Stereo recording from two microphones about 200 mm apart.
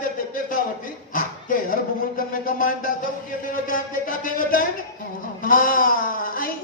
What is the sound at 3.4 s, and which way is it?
Speech, 45° left (ahead or behind).